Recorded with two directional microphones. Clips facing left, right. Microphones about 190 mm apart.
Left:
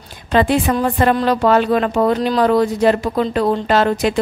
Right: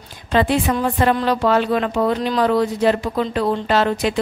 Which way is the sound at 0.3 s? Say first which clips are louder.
Left 2 dB; 50° left (ahead or behind).